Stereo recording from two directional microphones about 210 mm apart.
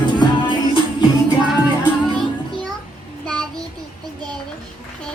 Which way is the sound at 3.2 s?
5° left (ahead or behind).